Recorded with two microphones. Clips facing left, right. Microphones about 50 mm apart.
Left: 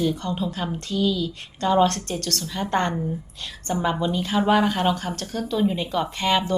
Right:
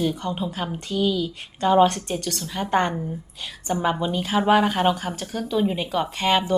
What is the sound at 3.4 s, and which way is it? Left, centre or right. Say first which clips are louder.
Speech: right 1 dB; centre.